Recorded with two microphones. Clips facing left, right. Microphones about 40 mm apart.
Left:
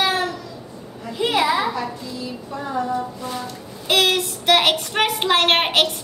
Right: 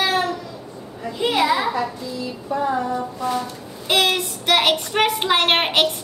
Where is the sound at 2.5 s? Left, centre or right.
Centre.